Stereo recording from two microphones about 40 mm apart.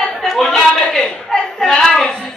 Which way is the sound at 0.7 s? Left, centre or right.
Centre.